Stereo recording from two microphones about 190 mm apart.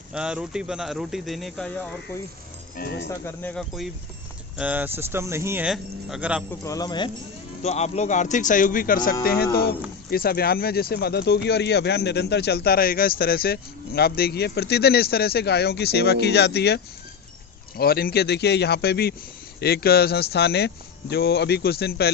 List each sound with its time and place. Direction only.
0.1 s speech: 5° right (ahead or behind)
3.1 s speech: 10° left (ahead or behind); by 6.4 s 5° right (ahead or behind)
6.7 s speech: 20° left (ahead or behind)
7.6 s speech: 35° left (ahead or behind); by 22.1 s 55° left (ahead or behind)